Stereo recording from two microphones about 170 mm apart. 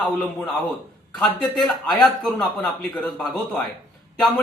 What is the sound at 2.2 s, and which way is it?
Speech, 5° left (ahead or behind).